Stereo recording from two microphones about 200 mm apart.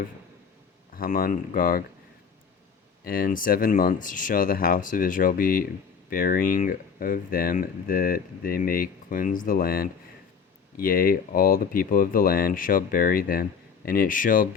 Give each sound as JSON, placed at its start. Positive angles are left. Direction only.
{"t": 0.9, "sound": "speech", "side_deg": 45}
{"t": 3.0, "sound": "speech", "side_deg": 45}